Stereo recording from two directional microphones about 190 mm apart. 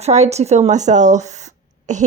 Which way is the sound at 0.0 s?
35° right (ahead or behind).